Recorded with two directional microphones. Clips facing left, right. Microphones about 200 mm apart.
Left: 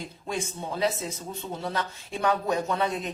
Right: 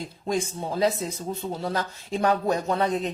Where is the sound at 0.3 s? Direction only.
35° right (ahead or behind).